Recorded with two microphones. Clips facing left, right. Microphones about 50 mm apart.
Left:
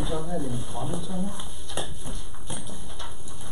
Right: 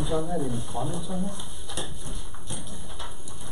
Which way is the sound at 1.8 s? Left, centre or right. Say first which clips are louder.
Left 3 dB; left.